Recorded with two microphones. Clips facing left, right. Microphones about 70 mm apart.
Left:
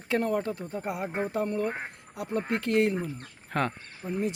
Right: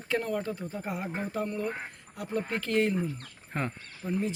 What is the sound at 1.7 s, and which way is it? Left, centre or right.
Quack, left.